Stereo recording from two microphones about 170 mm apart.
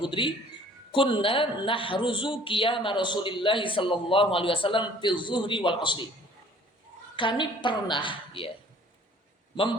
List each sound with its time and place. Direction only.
0.0 s speech: 30° left (ahead or behind)
7.2 s speech: 30° left (ahead or behind)